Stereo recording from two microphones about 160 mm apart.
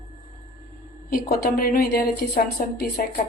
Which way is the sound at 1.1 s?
70° left (ahead or behind).